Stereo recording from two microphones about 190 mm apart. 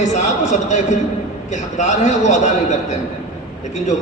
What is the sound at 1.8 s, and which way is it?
Speech, 40° left (ahead or behind).